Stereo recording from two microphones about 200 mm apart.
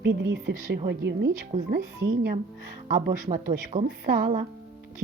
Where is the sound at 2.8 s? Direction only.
50° right (ahead or behind).